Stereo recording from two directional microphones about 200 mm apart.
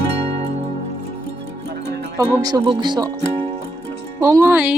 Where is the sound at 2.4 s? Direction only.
20° right (ahead or behind).